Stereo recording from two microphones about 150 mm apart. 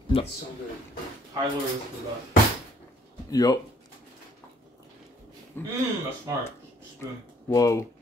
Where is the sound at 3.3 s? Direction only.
25° left (ahead or behind).